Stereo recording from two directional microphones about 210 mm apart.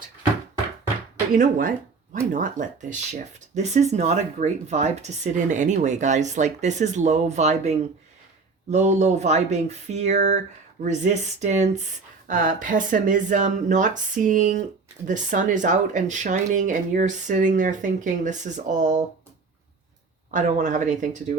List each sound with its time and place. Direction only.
1.4 s speech: 40° right (ahead or behind)
20.3 s speech: 35° right (ahead or behind)